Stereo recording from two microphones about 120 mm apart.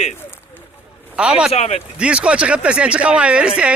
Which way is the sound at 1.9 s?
10° right (ahead or behind).